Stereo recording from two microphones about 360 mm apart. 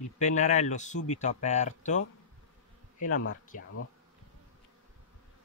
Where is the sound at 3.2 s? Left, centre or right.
Left.